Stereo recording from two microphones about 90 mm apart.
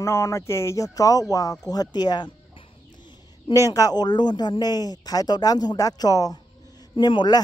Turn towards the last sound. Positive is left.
turn(degrees=55)  # may be behind; listen again after turning